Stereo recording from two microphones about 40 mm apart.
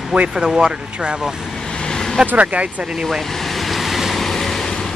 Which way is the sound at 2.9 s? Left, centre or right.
Centre.